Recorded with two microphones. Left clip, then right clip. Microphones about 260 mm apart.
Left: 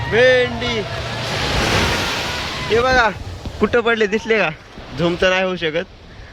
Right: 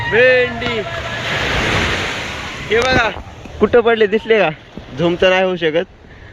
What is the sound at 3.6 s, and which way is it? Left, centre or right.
Speech, centre.